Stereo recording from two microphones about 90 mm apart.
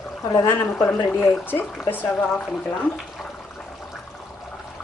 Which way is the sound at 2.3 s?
10° left (ahead or behind).